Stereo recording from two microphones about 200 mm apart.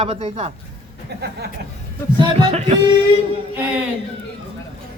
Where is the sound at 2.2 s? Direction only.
30° right (ahead or behind).